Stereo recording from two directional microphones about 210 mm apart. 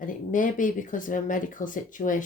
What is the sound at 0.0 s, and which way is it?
Speech, 40° left (ahead or behind).